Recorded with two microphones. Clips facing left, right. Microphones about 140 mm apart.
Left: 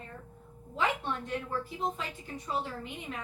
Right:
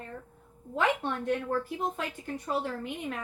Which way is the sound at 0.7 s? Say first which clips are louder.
Right 3 dB; 55° right (ahead or behind).